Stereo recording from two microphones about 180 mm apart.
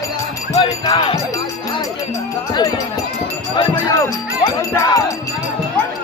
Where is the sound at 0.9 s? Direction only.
30° left (ahead or behind).